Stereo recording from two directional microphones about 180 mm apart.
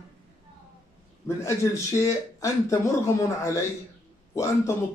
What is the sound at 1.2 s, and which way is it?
Speech, 15° left (ahead or behind).